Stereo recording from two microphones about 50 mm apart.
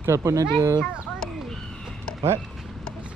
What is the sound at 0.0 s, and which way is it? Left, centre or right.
Speech, right.